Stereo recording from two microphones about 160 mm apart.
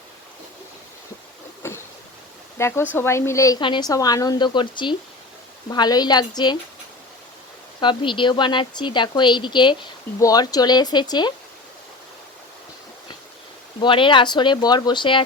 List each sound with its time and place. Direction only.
1.6 s a sound: 15° left (ahead or behind)
2.6 s speech: 15° left (ahead or behind)
7.8 s speech: 30° left (ahead or behind)
13.8 s speech: 30° left (ahead or behind)